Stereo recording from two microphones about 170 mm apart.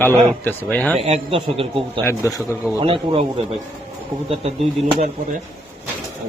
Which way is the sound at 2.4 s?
5° right (ahead or behind).